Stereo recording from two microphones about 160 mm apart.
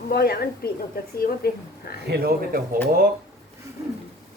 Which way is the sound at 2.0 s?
85° right.